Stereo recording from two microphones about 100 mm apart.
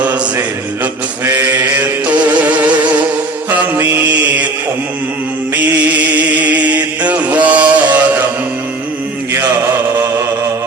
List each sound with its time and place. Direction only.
1.2 s mantra: 20° right (ahead or behind)
2.4 s insect: 15° right (ahead or behind)
3.8 s mantra: 15° right (ahead or behind)
6.1 s music: 15° right (ahead or behind)